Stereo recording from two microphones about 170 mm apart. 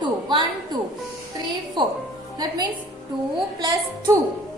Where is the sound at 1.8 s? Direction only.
30° right (ahead or behind).